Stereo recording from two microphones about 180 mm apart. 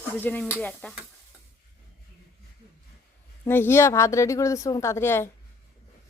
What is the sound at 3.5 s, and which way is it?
Speech, 10° left (ahead or behind).